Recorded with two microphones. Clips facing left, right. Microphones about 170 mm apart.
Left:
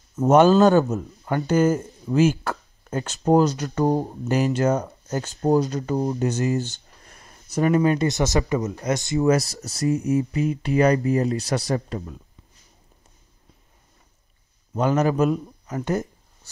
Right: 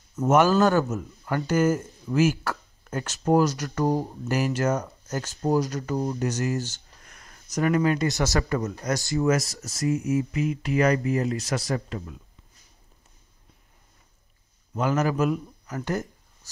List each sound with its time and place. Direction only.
0.1 s speech: 30° left (ahead or behind)
0.8 s speech: 35° left (ahead or behind)
9.6 s speech: 35° left (ahead or behind)
14.7 s speech: 30° left (ahead or behind)